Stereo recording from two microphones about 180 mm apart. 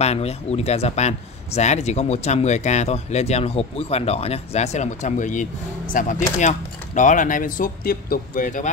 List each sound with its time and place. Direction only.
0.0 s speech: 35° left (ahead or behind)